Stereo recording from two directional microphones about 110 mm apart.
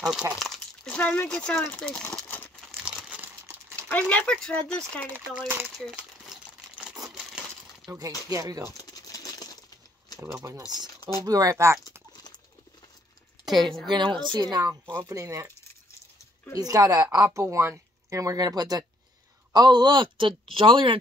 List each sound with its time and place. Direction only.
0.0 s speech: 5° right (ahead or behind)
0.8 s speech: 15° left (ahead or behind)
2.8 s crumpling: 10° right (ahead or behind)
3.9 s speech: 15° left (ahead or behind)
5.8 s crumpling: 5° right (ahead or behind)
8.3 s speech: 30° right (ahead or behind)
8.7 s patter: 35° left (ahead or behind)
11.0 s a sound: 40° left (ahead or behind)
11.2 s speech: 30° right (ahead or behind)
13.8 s speech: 45° right (ahead or behind); by 15.5 s 30° right (ahead or behind)
16.5 s speech: 35° right (ahead or behind); by 21.0 s 50° right (ahead or behind)